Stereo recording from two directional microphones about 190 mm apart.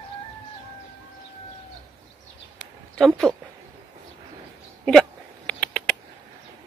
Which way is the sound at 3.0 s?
Centre (ahead or behind).